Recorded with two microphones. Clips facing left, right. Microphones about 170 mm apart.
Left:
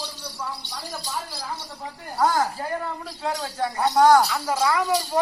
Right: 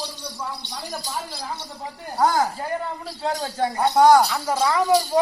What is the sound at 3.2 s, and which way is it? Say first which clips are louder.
Speech: right 3 dB; 30° right (ahead or behind).